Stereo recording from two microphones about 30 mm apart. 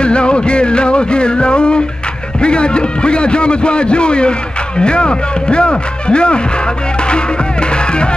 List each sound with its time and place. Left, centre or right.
0.0 s music: left
2.4 s a man's voice: left